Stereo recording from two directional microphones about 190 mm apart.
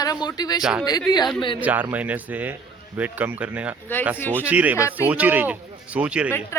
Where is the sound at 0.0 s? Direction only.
20° left (ahead or behind).